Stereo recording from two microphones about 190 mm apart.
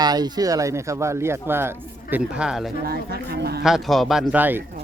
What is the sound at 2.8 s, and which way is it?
Speech, 55° right (ahead or behind).